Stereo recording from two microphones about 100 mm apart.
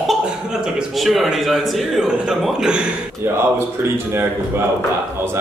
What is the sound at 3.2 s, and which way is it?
Speech, 25° right (ahead or behind).